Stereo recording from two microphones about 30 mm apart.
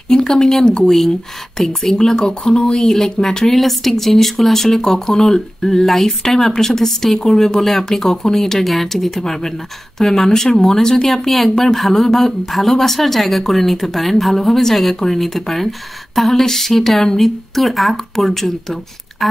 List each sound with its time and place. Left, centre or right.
0.1 s speech: left
2.0 s speech: left
2.9 s speech: centre
17.2 s speech: centre